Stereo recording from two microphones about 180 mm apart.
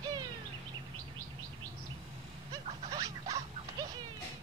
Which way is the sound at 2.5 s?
20° right (ahead or behind).